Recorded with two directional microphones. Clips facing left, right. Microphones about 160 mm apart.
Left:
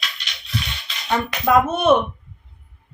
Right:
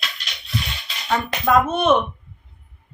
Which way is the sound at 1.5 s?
10° left (ahead or behind).